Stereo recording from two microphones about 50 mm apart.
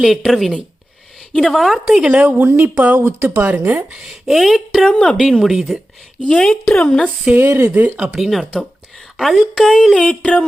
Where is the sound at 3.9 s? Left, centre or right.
Centre.